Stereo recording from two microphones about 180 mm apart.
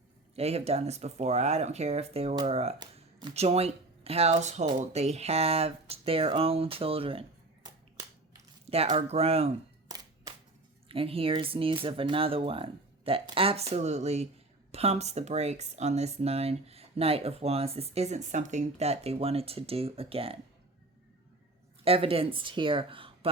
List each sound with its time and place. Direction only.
0.3 s speech: 35° right (ahead or behind)
2.3 s speech: 25° right (ahead or behind)
8.7 s speech: 35° right (ahead or behind)
9.9 s music: 20° right (ahead or behind)
10.8 s speech: 30° right (ahead or behind)
21.8 s speech: 30° right (ahead or behind)